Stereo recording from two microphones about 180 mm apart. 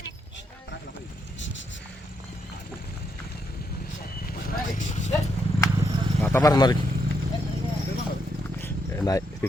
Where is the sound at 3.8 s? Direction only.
55° left (ahead or behind).